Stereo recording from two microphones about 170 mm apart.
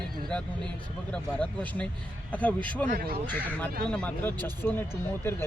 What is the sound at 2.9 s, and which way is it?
Speech, 60° right (ahead or behind).